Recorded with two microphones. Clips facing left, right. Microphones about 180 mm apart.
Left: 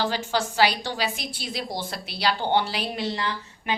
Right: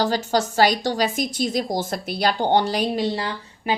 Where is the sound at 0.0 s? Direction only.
40° right (ahead or behind).